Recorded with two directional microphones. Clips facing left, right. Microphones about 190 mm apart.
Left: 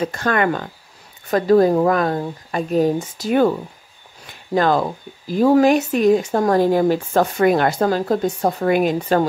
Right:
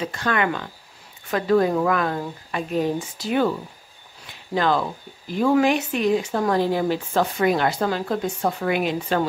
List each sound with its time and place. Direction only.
0.0 s speech: 45° left (ahead or behind)
4.6 s speech: 45° left (ahead or behind)